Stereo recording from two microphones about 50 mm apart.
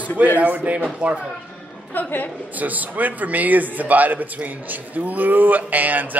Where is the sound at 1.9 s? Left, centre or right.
Left.